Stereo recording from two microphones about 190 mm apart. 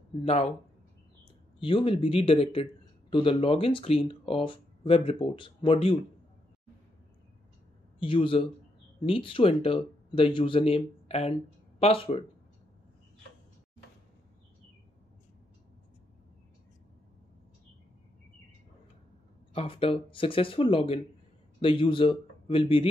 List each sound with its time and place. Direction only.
0.2 s speech: 35° left (ahead or behind)
8.0 s speech: 25° left (ahead or behind)
19.5 s a man's voice: 30° left (ahead or behind)